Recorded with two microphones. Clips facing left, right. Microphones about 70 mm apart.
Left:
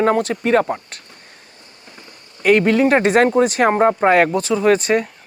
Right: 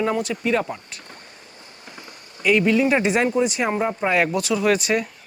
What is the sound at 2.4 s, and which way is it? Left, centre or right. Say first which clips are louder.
Speech: left 4 dB; left.